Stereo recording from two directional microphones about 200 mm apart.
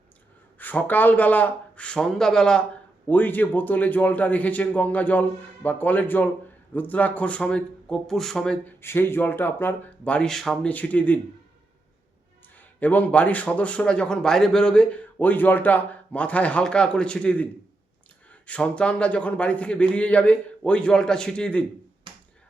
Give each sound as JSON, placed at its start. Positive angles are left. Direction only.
{"t": 0.6, "sound": "a man's voice", "side_deg": 10}
{"t": 12.8, "sound": "a man's voice", "side_deg": 10}
{"t": 22.1, "sound": "finger snapping", "side_deg": -25}